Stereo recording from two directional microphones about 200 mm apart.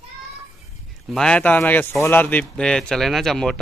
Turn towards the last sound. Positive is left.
turn(degrees=0)  # may be behind; listen again after turning